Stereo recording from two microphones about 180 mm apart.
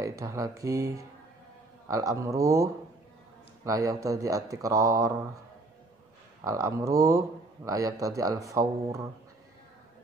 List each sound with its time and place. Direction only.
0.0 s a man's voice: 15° right (ahead or behind)
6.4 s speech: 20° right (ahead or behind)